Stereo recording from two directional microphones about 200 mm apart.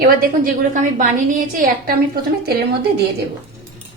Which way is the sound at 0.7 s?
40° right (ahead or behind).